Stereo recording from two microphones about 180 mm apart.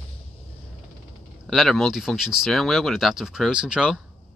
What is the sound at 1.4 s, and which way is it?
Speech, centre (ahead or behind).